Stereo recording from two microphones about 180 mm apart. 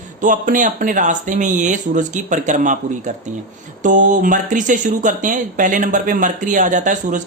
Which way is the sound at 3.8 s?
45° right (ahead or behind).